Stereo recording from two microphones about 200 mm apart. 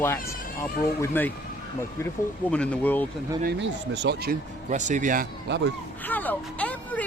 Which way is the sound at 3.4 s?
60° right (ahead or behind).